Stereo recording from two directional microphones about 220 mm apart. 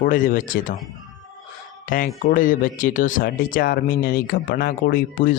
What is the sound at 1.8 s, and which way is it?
Speech, 40° left (ahead or behind).